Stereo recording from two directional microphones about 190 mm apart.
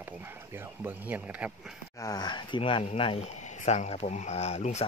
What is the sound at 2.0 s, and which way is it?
Speech, 20° left (ahead or behind).